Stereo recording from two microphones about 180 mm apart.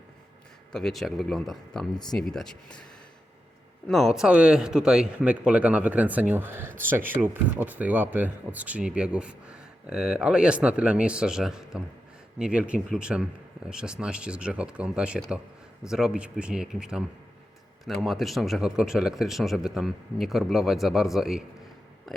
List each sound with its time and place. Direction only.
0.7 s speech: centre (ahead or behind)
3.8 s speech: centre (ahead or behind)